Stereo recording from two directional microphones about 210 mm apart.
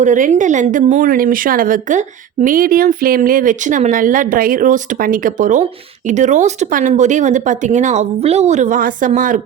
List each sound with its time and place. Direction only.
0.0 s a woman's voice: 35° right (ahead or behind)